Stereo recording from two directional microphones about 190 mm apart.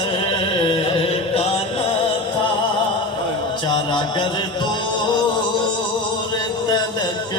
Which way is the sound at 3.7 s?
25° left (ahead or behind).